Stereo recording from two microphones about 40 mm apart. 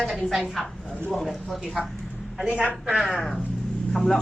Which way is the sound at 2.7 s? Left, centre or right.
Centre.